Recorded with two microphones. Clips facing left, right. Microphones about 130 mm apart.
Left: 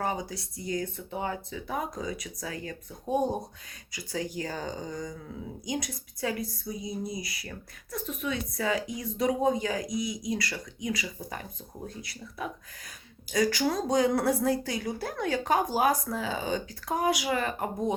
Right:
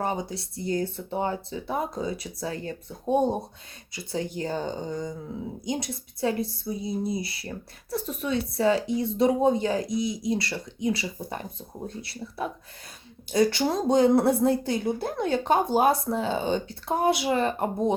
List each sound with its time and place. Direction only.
0.0 s speech: 25° right (ahead or behind)
13.3 s speech: 30° right (ahead or behind)